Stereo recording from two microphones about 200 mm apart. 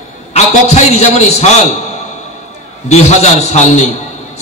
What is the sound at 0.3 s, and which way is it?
A man's voice, 35° left (ahead or behind).